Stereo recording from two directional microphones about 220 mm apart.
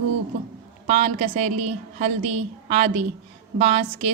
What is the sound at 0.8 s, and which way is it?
A woman's voice, 30° right (ahead or behind).